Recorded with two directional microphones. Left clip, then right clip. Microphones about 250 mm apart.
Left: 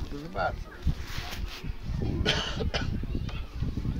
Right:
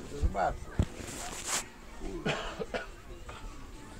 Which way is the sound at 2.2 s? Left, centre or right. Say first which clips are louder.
Left 6 dB; left.